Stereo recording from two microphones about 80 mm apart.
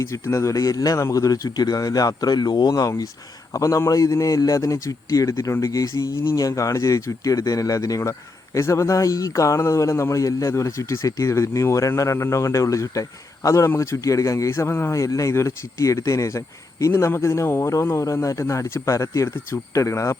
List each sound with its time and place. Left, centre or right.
0.0 s speech: left
2.7 s speech: left
16.9 s speech: left